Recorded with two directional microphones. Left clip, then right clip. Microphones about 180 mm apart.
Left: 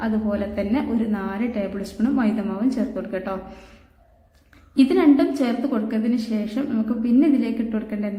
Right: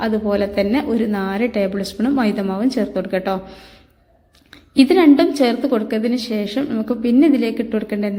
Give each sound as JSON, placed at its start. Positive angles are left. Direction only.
{"t": 0.0, "sound": "a woman's voice", "side_deg": -35}
{"t": 4.7, "sound": "a woman's voice", "side_deg": -35}